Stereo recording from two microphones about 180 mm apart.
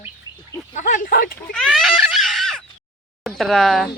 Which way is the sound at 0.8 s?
45° left (ahead or behind).